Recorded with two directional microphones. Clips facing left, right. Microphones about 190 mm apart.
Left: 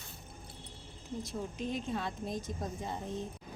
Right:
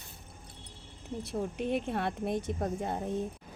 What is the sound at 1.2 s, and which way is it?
Speech, 65° right (ahead or behind).